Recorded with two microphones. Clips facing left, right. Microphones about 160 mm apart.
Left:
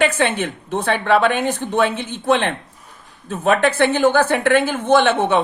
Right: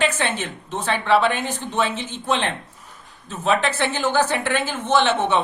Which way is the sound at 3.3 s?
55° left (ahead or behind).